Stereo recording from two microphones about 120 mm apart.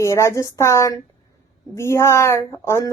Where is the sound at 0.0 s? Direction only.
25° left (ahead or behind).